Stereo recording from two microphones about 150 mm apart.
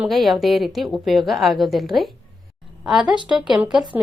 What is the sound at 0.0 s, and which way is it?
A woman's voice, centre (ahead or behind).